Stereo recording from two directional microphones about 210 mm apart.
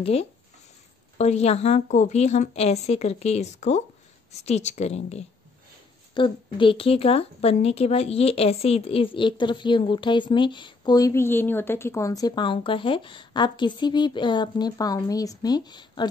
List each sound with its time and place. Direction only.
0.0 s a woman's voice: 30° left (ahead or behind)